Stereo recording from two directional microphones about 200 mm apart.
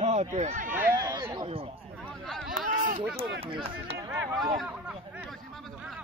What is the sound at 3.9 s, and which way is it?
Speech, 10° right (ahead or behind).